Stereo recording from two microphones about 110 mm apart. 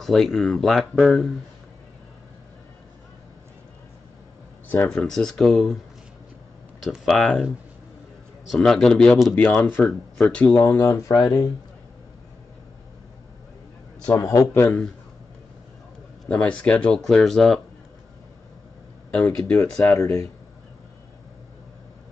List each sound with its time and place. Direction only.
0.0 s speech: 5° left (ahead or behind)
4.6 s speech: 10° left (ahead or behind)
6.8 s speech: centre (ahead or behind)
8.5 s speech: 5° left (ahead or behind); by 11.2 s 30° left (ahead or behind)
14.0 s a man's voice: 35° left (ahead or behind)
14.5 s speech: 20° left (ahead or behind)
16.3 s speech: 10° left (ahead or behind)
19.0 s speech: 10° left (ahead or behind); by 20.1 s 30° left (ahead or behind)